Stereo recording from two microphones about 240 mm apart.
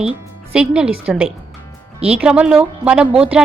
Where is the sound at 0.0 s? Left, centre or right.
Centre.